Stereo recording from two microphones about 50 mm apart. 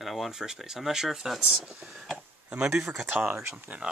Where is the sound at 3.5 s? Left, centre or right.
Right.